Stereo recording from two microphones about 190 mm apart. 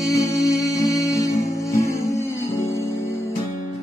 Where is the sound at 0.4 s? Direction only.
15° left (ahead or behind).